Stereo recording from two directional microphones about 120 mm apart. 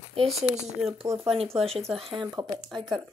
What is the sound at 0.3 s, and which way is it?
Speech, centre (ahead or behind).